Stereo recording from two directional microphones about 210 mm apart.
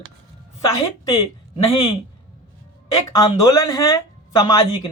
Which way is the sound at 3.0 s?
20° left (ahead or behind).